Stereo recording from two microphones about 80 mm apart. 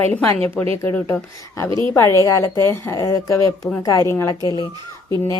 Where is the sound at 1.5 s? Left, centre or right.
Left.